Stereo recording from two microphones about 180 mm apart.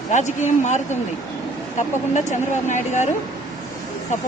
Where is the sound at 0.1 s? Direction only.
40° left (ahead or behind).